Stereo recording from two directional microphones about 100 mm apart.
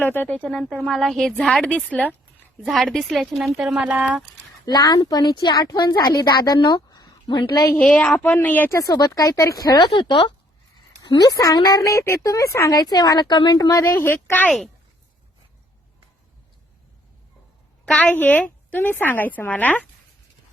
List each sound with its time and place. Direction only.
0.0 s a woman's voice: 20° left (ahead or behind)
0.9 s a woman's voice: centre (ahead or behind)
2.6 s a woman's voice: 5° right (ahead or behind)
3.8 s speech: 15° right (ahead or behind)
4.6 s a woman's voice: 45° left (ahead or behind)
7.8 s a woman's voice: 10° left (ahead or behind)
8.7 s a woman's voice: 35° left (ahead or behind); by 10.3 s 55° left (ahead or behind)
11.0 s a sound: 50° left (ahead or behind)
11.3 s a woman's voice: 35° left (ahead or behind); by 14.5 s 20° left (ahead or behind)
17.8 s a woman's voice: 15° left (ahead or behind)